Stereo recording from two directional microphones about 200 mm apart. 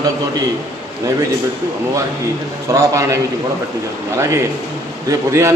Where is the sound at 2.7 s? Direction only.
15° right (ahead or behind).